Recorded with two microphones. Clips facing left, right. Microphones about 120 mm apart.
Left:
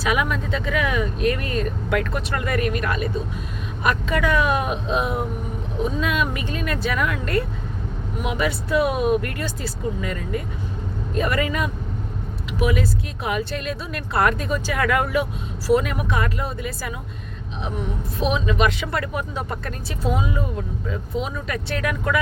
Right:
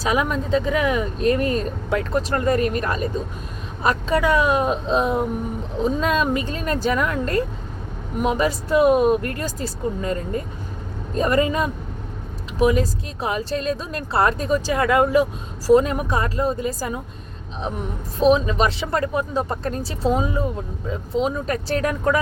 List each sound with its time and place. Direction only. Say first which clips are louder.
0.0 s speech: right 1 dB; 35° right (ahead or behind)
18.2 s speech: right 4 dB; 35° right (ahead or behind)